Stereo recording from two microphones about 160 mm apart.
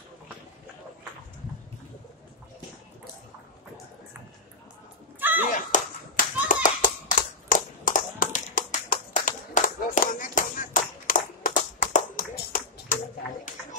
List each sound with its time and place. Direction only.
5.2 s a sound: 10° right (ahead or behind)
5.5 s clapping: 55° left (ahead or behind)
12.2 s tap: 60° left (ahead or behind)